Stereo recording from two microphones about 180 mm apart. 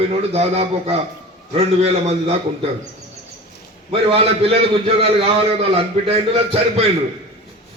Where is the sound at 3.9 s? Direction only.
30° right (ahead or behind).